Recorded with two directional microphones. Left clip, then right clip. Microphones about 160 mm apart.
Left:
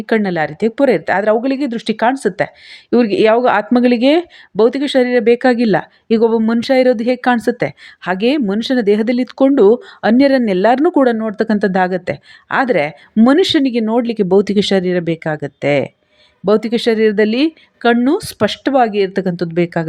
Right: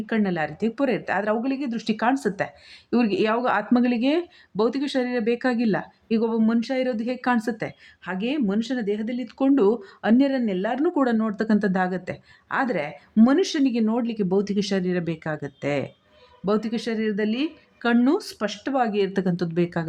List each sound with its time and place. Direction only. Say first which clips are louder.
0.0 s speech: left 10 dB; 35° left (ahead or behind)
8.0 s speech: left 12 dB; 45° left (ahead or behind)
10.9 s speech: left 10 dB; 30° left (ahead or behind)